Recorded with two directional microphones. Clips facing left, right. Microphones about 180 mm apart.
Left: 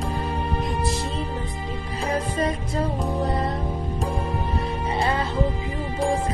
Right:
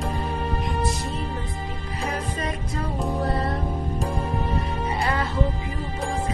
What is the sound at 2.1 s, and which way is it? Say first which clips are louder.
Music: left 7 dB; 30° left (ahead or behind).